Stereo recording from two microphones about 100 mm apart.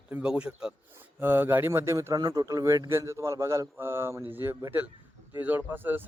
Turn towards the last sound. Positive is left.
turn(degrees=-20)  # may be behind; listen again after turning